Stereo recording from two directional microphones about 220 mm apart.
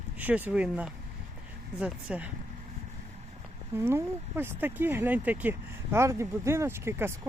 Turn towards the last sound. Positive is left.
turn(degrees=-10)  # may be behind; listen again after turning